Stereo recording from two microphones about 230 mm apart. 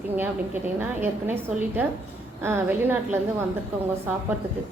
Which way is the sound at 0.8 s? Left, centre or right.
Centre.